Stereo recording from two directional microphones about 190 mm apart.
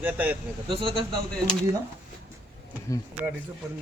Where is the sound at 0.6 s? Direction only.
25° right (ahead or behind).